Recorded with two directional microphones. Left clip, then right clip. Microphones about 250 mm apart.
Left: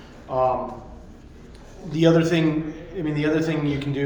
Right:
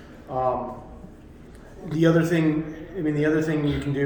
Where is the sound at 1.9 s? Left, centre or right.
Centre.